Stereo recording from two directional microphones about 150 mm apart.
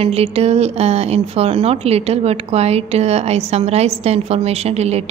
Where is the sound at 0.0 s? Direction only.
45° right (ahead or behind).